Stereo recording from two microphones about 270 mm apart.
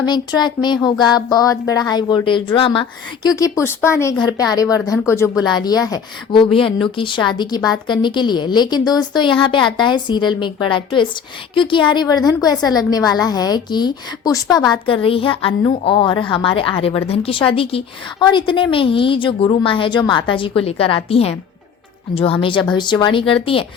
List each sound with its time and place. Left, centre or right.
0.0 s a woman's voice: centre